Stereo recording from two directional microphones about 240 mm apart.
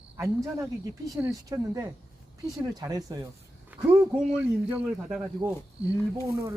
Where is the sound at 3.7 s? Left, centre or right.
Centre.